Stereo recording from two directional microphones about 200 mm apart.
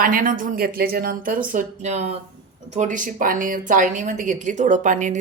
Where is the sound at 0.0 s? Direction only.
45° right (ahead or behind).